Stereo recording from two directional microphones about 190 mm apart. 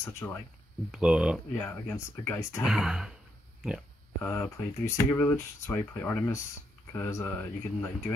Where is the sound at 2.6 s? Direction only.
Centre (ahead or behind).